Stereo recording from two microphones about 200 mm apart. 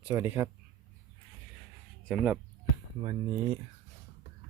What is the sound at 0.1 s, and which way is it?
Speech, 10° right (ahead or behind).